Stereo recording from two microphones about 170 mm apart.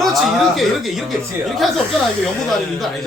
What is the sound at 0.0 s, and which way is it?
A man's voice, centre (ahead or behind).